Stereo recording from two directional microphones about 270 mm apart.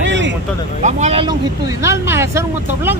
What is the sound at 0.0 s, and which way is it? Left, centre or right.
Vehicle, right.